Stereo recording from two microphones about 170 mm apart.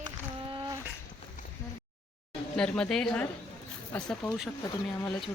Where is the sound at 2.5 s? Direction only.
5° left (ahead or behind).